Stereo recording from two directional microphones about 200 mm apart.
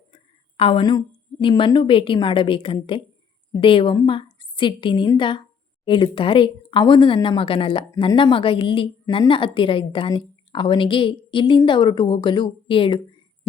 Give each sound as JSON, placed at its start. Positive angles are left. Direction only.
{"t": 0.1, "sound": "a woman's voice", "side_deg": 25}